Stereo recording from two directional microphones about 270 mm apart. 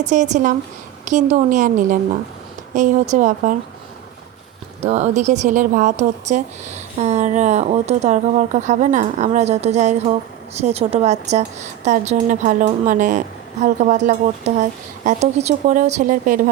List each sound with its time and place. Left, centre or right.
0.0 s a woman's voice: right
4.8 s a woman's voice: right